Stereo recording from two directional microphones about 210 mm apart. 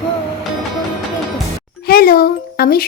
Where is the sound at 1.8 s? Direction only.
45° left (ahead or behind).